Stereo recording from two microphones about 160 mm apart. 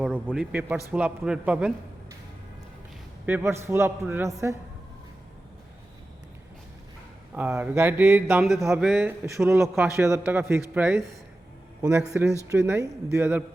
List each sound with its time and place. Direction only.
0.0 s a man's voice: 5° right (ahead or behind)
3.2 s a man's voice: 15° right (ahead or behind)
7.3 s a man's voice: 10° right (ahead or behind)
8.4 s speech: centre (ahead or behind)
9.2 s a man's voice: 15° right (ahead or behind)